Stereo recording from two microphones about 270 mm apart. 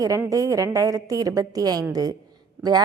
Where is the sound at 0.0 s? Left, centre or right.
Centre.